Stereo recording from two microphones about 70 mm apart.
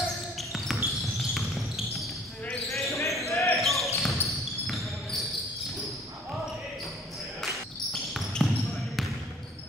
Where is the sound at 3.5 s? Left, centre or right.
Centre.